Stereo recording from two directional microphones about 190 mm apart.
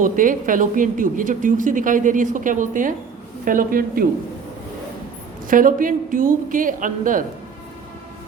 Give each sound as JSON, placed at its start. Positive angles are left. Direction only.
{"t": 0.0, "sound": "a woman's voice", "side_deg": -45}
{"t": 5.5, "sound": "a woman's voice", "side_deg": -45}